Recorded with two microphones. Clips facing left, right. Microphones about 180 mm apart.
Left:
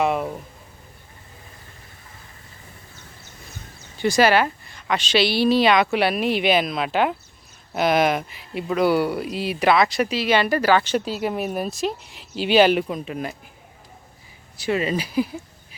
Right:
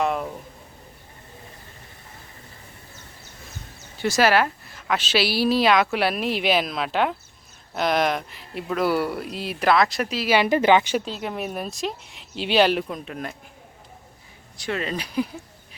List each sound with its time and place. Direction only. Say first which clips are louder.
0.0 s speech: left 3 dB; 5° left (ahead or behind)
3.9 s a woman's voice: left 2 dB; centre (ahead or behind)
10.3 s speech: right 1 dB; 20° right (ahead or behind)
11.0 s a woman's voice: left 4 dB; 5° left (ahead or behind)
14.6 s a woman's voice: left 5 dB; 5° left (ahead or behind)